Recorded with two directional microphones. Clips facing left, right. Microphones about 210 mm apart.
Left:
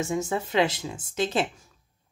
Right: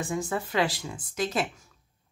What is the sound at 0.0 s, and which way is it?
Speech, 25° left (ahead or behind).